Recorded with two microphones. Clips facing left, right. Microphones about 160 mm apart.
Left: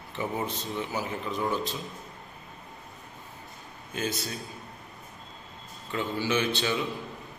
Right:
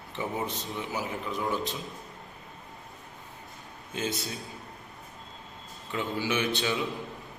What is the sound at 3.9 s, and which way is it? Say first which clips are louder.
Speech: left 1 dB; 20° right (ahead or behind).